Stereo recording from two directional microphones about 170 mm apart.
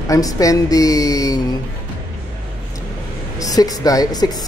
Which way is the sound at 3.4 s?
20° left (ahead or behind).